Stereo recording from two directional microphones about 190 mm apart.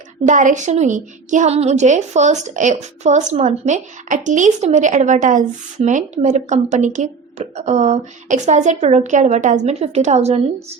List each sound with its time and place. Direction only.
0.3 s a woman's voice: 40° right (ahead or behind)